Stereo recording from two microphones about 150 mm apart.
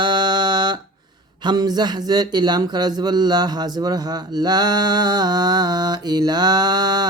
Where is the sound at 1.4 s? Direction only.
30° right (ahead or behind).